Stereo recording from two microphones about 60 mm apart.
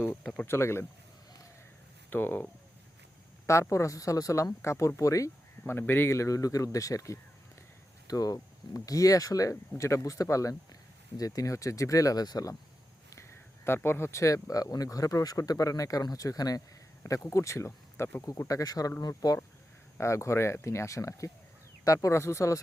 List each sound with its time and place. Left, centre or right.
0.4 s speech: left
2.0 s speech: left
3.4 s speech: left
5.6 s speech: left
6.1 s speech: left
8.0 s speech: left
11.2 s speech: left
11.5 s speech: left
13.1 s speech: left
17.2 s speech: left
18.4 s speech: left
20.0 s speech: left